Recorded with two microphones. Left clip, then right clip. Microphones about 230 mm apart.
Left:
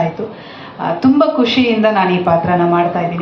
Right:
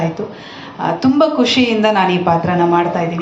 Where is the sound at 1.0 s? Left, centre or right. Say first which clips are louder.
Left 1 dB; right.